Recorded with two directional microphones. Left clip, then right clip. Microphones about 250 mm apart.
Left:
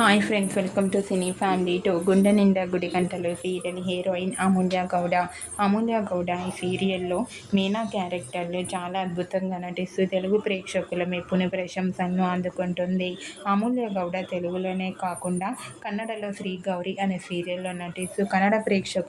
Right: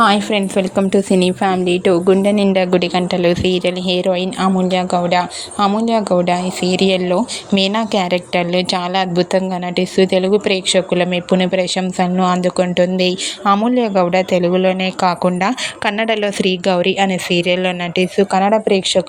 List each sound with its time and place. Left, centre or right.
0.0 s a woman's voice: right
2.2 s a woman's voice: centre